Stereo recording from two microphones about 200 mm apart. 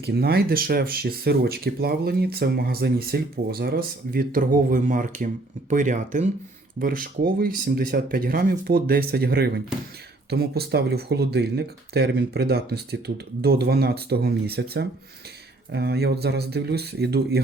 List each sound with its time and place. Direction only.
0.0 s speech: 55° right (ahead or behind)